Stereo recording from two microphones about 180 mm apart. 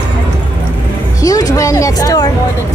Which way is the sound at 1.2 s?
20° left (ahead or behind).